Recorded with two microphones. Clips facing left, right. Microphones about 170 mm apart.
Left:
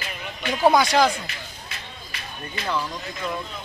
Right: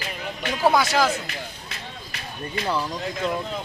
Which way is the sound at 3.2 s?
25° right (ahead or behind).